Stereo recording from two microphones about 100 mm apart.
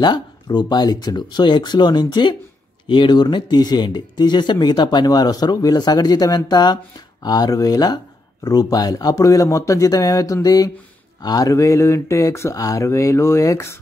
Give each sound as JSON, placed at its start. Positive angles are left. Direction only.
{"t": 0.0, "sound": "speech", "side_deg": 45}